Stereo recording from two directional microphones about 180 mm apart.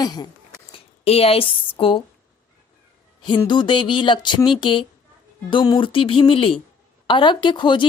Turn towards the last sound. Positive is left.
turn(degrees=25)  # may be behind; listen again after turning